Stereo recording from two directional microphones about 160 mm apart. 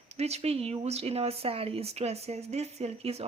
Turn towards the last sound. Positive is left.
turn(degrees=-40)  # may be behind; listen again after turning